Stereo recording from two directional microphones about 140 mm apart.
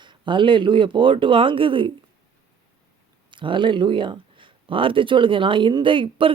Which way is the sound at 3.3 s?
35° right (ahead or behind).